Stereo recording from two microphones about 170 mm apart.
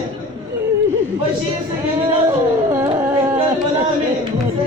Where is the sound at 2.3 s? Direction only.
15° right (ahead or behind).